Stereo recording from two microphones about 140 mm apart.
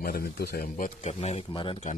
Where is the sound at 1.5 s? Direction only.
35° left (ahead or behind).